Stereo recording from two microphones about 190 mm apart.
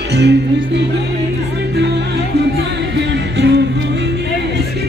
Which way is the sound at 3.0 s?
65° right (ahead or behind).